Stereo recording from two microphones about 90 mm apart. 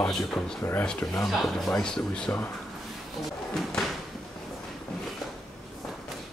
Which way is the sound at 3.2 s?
Centre (ahead or behind).